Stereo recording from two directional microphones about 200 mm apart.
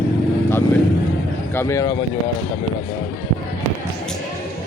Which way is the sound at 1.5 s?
15° left (ahead or behind).